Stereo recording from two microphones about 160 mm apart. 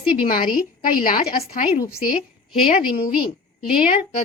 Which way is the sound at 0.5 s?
60° left (ahead or behind).